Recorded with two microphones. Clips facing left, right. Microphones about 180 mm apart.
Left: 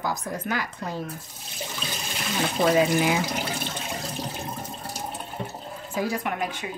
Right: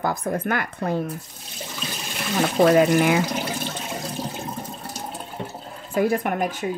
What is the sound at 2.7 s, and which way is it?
Speech, 55° right (ahead or behind).